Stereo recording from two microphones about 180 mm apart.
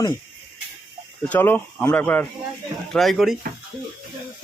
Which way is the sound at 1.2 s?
10° left (ahead or behind).